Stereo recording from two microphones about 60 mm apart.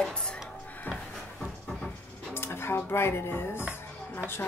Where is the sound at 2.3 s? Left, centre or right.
Left.